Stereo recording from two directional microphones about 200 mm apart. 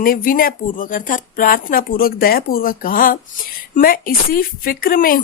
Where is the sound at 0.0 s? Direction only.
45° left (ahead or behind).